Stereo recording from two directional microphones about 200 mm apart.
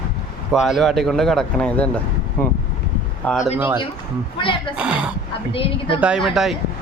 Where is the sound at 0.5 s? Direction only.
Centre (ahead or behind).